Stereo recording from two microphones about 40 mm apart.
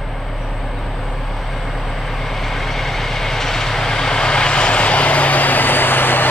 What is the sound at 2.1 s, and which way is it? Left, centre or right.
Vehicle, centre.